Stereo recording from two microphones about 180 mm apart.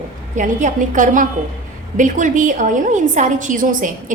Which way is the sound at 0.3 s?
45° right (ahead or behind).